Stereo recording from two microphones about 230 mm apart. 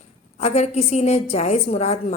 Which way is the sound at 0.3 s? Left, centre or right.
Left.